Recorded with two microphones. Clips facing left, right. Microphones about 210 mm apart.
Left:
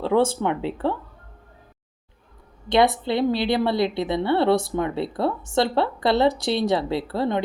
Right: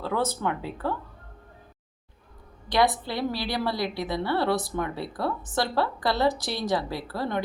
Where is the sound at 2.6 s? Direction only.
25° left (ahead or behind).